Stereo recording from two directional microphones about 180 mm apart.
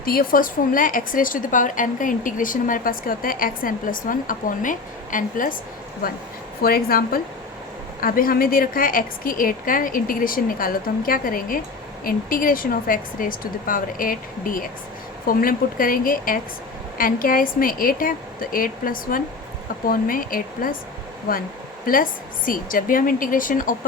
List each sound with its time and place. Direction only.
0.0 s a woman's voice: 55° left (ahead or behind)
21.8 s a woman's voice: 50° left (ahead or behind)